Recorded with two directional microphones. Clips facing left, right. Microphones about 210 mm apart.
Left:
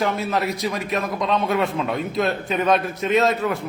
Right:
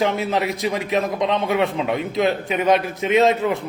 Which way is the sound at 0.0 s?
20° right (ahead or behind).